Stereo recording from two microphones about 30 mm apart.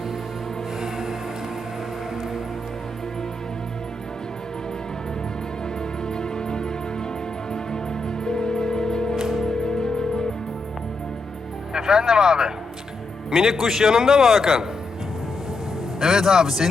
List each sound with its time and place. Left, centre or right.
0.8 s music: centre
6.0 s music: left
11.7 s a man's voice: right
16.0 s a man's voice: centre